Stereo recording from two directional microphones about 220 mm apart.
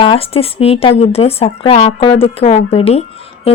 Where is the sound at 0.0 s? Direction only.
25° left (ahead or behind).